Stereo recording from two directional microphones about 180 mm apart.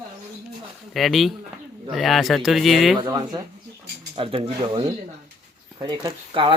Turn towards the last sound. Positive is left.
turn(degrees=-30)  # may be behind; listen again after turning